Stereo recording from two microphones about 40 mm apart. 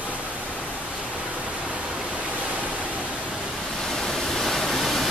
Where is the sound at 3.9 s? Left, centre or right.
Centre.